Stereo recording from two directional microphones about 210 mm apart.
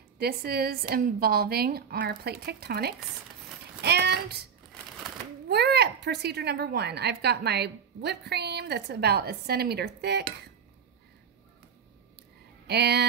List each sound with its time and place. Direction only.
0.2 s a woman's voice: 45° right (ahead or behind)
3.8 s a sound: 50° right (ahead or behind)
5.5 s a woman's voice: 50° right (ahead or behind)
12.6 s speech: 50° right (ahead or behind)